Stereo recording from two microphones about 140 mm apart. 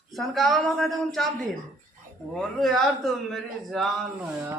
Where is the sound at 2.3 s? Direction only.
Centre (ahead or behind).